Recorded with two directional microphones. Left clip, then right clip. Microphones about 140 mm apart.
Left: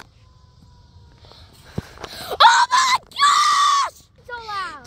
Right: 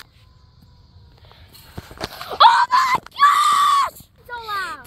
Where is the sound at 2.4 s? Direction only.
30° left (ahead or behind).